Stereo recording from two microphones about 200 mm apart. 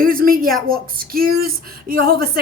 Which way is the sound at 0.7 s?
45° right (ahead or behind).